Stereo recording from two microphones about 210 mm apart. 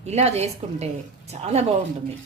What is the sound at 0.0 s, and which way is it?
Speech, 30° right (ahead or behind).